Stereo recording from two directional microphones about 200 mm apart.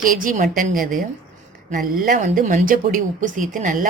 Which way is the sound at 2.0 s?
40° right (ahead or behind).